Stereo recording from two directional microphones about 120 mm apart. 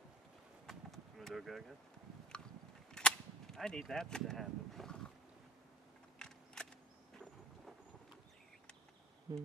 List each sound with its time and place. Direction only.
0.7 s a sound: centre (ahead or behind)
2.9 s cap gun: 5° left (ahead or behind)
6.1 s single-lens reflex camera: 5° left (ahead or behind)
9.3 s speech: 35° right (ahead or behind)